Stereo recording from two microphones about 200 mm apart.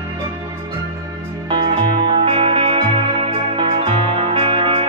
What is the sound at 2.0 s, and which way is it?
Music, 25° right (ahead or behind).